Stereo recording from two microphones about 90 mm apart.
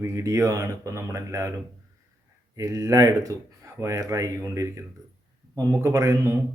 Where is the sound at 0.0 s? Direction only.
35° right (ahead or behind).